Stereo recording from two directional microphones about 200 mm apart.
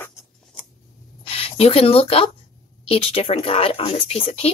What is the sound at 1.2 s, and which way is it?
Speech, 30° left (ahead or behind).